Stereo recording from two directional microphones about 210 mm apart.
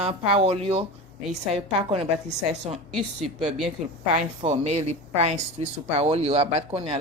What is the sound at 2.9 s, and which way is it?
Speech, centre (ahead or behind).